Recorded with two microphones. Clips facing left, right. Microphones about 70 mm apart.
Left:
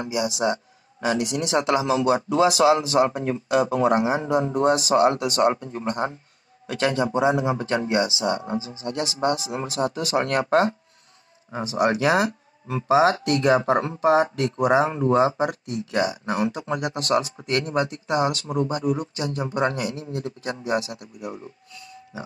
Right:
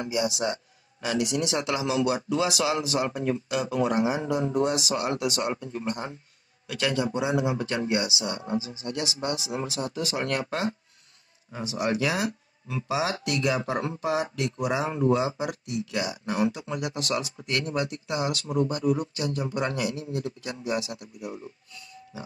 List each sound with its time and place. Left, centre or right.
0.0 s speech: left
6.7 s speech: left